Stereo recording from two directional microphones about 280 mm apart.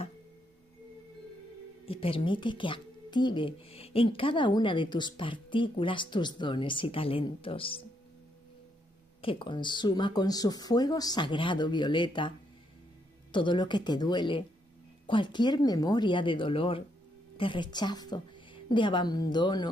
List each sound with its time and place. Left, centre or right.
1.9 s speech: centre
9.2 s speech: centre